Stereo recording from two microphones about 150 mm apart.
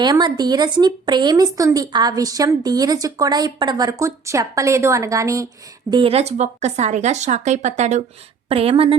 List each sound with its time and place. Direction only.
0.0 s speech: 30° right (ahead or behind)
5.9 s speech: 40° right (ahead or behind)
8.4 s speech: 40° right (ahead or behind)